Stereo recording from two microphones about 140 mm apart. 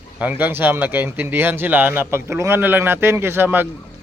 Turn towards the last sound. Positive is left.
turn(degrees=-15)  # may be behind; listen again after turning